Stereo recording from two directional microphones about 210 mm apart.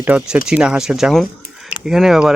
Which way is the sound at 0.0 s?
5° right (ahead or behind).